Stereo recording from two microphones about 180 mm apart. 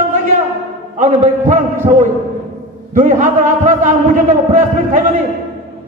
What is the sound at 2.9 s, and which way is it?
A man's voice, 45° right (ahead or behind).